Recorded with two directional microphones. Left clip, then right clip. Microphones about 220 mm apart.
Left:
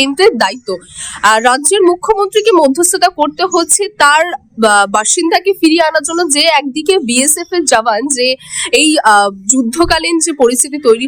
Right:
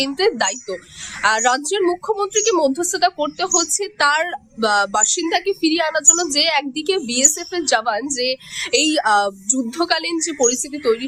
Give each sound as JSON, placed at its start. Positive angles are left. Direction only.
{"t": 0.0, "sound": "speech", "side_deg": 40}